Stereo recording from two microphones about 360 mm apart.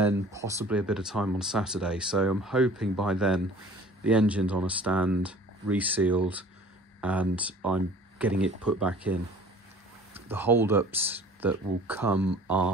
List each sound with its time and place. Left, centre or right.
0.0 s speech: centre